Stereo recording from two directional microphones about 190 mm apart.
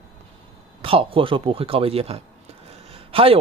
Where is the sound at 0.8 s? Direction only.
30° right (ahead or behind).